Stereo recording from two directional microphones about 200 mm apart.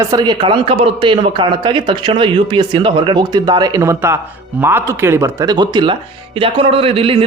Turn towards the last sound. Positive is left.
turn(degrees=-30)  # may be behind; listen again after turning